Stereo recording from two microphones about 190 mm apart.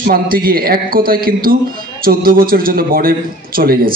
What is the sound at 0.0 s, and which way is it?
A man's voice, 50° right (ahead or behind).